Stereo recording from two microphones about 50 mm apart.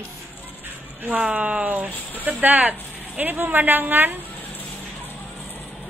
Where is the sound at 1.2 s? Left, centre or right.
Right.